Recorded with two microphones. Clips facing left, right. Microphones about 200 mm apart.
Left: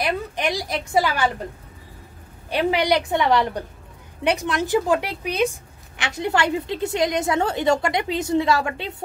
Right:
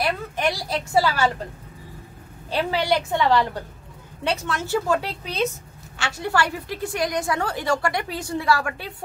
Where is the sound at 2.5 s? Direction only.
15° left (ahead or behind).